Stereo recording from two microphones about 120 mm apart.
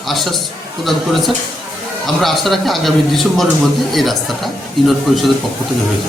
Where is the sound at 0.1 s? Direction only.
Centre (ahead or behind).